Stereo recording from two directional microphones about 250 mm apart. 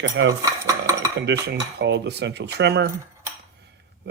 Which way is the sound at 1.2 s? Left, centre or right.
Right.